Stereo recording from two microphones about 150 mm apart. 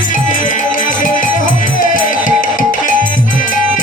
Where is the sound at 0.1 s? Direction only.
60° left (ahead or behind).